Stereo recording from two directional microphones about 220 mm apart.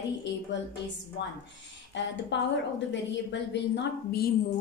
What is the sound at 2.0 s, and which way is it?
A woman's voice, 55° left (ahead or behind).